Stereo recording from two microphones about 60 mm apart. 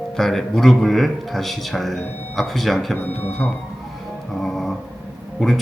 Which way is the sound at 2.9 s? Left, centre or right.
Left.